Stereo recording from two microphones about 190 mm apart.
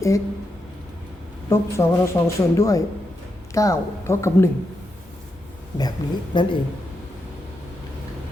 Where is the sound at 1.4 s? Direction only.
15° left (ahead or behind).